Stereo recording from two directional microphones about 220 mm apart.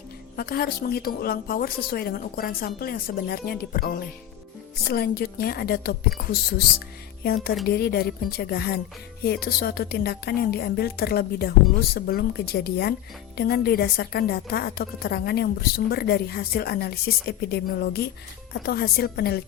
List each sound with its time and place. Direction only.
0.3 s a woman's voice: 45° left (ahead or behind)